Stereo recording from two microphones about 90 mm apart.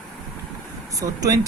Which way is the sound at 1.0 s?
40° right (ahead or behind).